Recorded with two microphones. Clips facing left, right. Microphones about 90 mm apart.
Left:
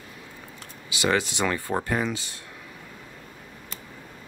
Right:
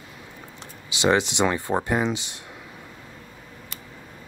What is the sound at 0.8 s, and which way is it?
Speech, 25° right (ahead or behind).